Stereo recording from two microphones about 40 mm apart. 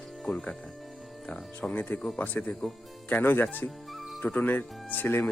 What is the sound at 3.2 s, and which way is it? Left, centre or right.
Speech, left.